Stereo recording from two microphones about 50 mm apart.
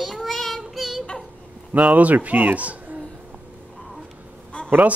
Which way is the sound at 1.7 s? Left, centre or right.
Right.